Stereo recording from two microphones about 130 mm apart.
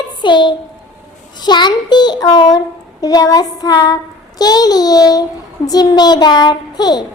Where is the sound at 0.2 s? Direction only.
35° left (ahead or behind).